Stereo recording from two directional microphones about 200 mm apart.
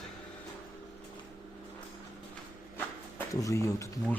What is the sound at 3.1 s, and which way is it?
Speech, 15° left (ahead or behind).